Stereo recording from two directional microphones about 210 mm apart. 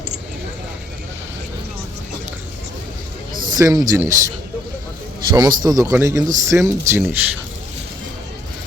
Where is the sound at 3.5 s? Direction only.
15° right (ahead or behind).